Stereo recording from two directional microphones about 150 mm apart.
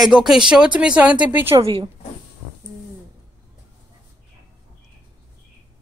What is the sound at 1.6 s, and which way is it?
Speech, 35° right (ahead or behind).